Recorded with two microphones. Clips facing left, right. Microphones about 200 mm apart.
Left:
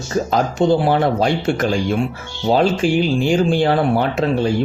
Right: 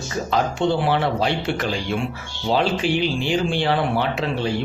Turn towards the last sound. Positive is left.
turn(degrees=45)  # may be behind; listen again after turning